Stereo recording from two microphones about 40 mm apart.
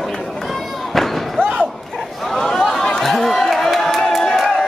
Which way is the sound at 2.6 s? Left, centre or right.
Centre.